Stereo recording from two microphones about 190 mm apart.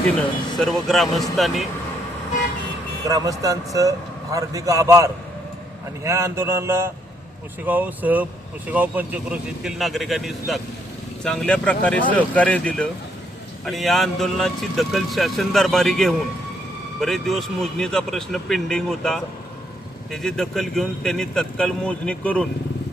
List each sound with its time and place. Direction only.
0.6 s speech: centre (ahead or behind)
3.1 s a man's voice: 20° right (ahead or behind); by 22.4 s 5° left (ahead or behind)